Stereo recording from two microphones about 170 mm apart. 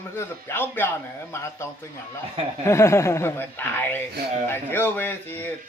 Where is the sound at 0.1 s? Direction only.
15° left (ahead or behind).